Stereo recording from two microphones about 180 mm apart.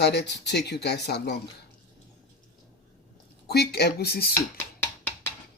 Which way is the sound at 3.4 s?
65° left (ahead or behind).